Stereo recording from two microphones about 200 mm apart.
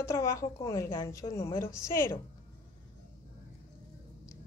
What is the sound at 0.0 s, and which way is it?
A woman's voice, 15° left (ahead or behind).